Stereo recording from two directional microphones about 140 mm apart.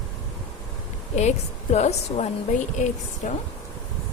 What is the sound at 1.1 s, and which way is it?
A woman's voice, 55° left (ahead or behind).